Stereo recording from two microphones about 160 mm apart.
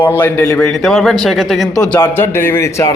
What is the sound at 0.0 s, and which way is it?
Speech, 15° left (ahead or behind).